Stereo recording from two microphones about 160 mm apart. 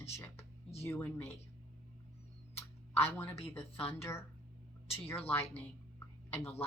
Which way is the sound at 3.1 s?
15° left (ahead or behind).